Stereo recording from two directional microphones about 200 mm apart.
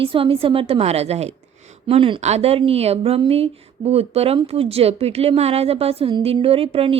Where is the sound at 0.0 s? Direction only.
25° right (ahead or behind).